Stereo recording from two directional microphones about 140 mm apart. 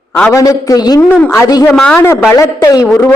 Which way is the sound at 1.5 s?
25° left (ahead or behind).